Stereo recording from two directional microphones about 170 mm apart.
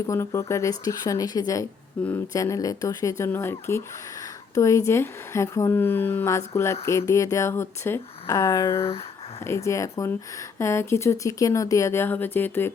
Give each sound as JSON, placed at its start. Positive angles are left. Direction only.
{"t": 0.1, "sound": "speech", "side_deg": 15}